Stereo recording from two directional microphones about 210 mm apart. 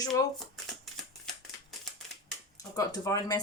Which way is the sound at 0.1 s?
Centre (ahead or behind).